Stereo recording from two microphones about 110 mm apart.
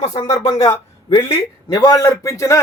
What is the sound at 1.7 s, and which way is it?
Speech, 35° left (ahead or behind).